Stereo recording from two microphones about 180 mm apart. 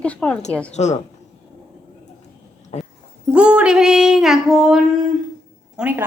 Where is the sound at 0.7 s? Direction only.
40° left (ahead or behind).